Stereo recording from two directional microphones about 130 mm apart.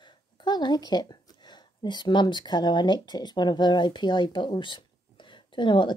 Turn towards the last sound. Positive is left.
turn(degrees=40)  # may be behind; listen again after turning